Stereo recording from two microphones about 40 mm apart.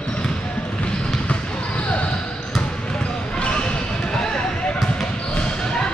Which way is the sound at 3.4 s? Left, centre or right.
Left.